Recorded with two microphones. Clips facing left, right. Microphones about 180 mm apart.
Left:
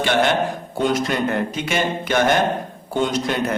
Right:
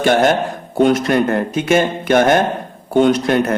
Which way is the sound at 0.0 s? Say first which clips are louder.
Right 5 dB; 45° right (ahead or behind).